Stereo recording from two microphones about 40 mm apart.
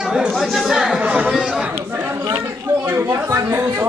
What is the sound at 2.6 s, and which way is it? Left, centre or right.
Speech, right.